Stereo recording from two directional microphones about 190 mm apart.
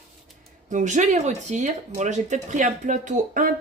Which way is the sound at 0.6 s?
40° right (ahead or behind).